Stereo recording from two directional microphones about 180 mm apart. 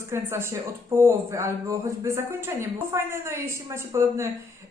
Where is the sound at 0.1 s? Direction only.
15° right (ahead or behind).